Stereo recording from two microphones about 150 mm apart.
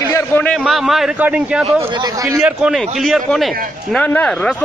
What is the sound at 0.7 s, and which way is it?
A man's voice, centre (ahead or behind).